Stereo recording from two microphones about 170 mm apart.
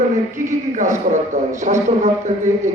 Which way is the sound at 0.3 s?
45° right (ahead or behind).